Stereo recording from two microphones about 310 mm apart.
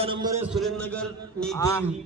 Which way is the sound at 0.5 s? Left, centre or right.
Centre.